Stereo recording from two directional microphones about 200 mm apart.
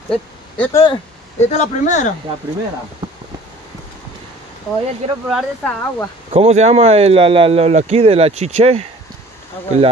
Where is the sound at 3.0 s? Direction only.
20° right (ahead or behind).